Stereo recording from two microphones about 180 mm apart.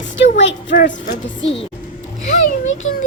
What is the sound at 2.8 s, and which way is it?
Speech, 90° left.